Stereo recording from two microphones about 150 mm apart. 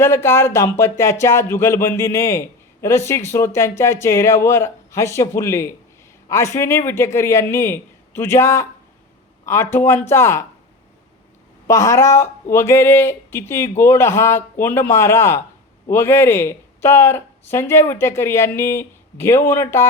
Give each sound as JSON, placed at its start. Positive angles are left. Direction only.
{"t": 0.0, "sound": "speech", "side_deg": 15}
{"t": 11.7, "sound": "speech", "side_deg": 20}